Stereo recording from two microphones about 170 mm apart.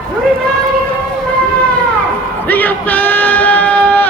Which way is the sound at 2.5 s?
10° left (ahead or behind).